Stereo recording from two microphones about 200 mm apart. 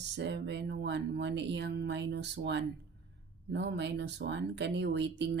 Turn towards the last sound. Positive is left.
turn(degrees=-60)  # may be behind; listen again after turning